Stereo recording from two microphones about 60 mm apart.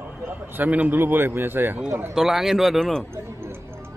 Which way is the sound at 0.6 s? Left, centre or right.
Right.